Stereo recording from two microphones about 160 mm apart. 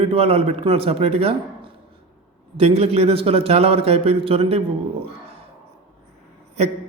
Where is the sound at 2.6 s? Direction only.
40° right (ahead or behind).